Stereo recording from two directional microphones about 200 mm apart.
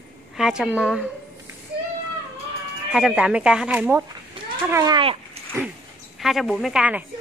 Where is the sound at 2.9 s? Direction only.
5° right (ahead or behind); by 5.4 s 25° right (ahead or behind).